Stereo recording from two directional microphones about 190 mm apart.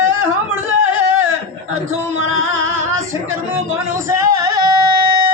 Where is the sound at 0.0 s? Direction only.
15° right (ahead or behind).